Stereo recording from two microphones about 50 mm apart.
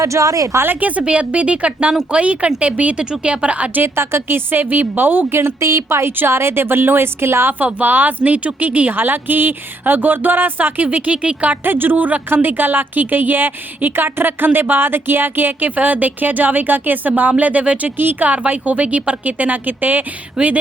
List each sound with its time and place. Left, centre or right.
0.0 s a woman's voice: right
0.6 s a woman's voice: right
3.9 s a woman's voice: right
5.4 s a woman's voice: right
7.6 s a woman's voice: right
10.8 s speech: right
11.6 s a woman's voice: right
17.9 s a woman's voice: right
18.3 s a woman's voice: right